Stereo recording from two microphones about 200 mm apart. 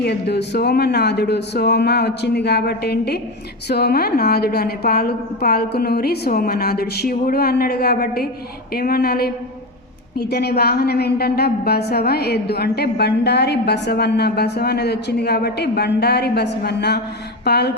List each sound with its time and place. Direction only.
0.0 s a woman's voice: 55° left (ahead or behind)